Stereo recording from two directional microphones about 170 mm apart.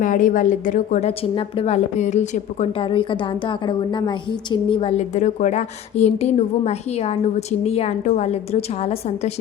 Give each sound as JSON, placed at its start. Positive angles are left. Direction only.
{"t": 0.0, "sound": "a woman's voice", "side_deg": 50}